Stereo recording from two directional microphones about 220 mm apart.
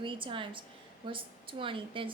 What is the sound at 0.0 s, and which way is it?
A woman's voice, 20° right (ahead or behind).